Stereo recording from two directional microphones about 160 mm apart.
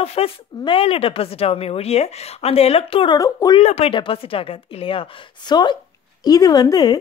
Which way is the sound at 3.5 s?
40° left (ahead or behind).